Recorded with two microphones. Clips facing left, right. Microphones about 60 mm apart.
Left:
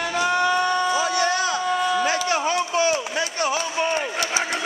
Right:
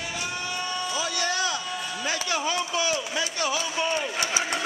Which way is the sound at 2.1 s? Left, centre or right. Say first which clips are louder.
Left 6 dB; left.